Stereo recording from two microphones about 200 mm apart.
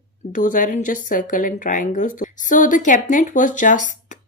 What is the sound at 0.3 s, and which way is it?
Speech, 40° left (ahead or behind).